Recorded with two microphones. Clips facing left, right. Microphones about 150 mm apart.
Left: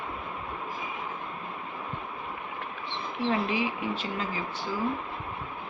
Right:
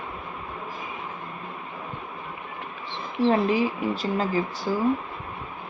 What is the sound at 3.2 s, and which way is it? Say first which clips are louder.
Speech: right 7 dB; 40° right (ahead or behind).